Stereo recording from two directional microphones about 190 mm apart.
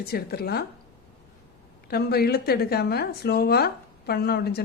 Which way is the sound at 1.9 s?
55° left (ahead or behind).